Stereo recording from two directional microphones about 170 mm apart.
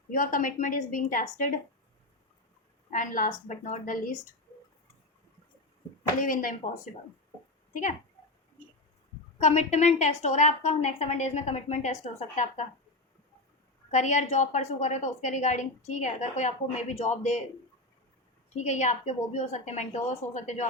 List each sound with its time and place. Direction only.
0.1 s a woman's voice: 55° left (ahead or behind)
2.9 s a woman's voice: 50° left (ahead or behind)
6.1 s a woman's voice: 50° left (ahead or behind)
9.4 s a woman's voice: 45° left (ahead or behind)
13.9 s a woman's voice: 45° left (ahead or behind)
18.5 s a woman's voice: 45° left (ahead or behind)